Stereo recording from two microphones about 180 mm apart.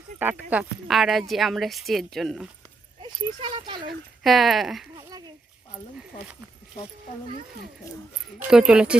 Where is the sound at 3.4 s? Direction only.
25° right (ahead or behind).